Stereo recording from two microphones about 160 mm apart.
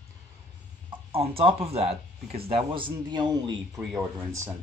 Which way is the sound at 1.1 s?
40° right (ahead or behind).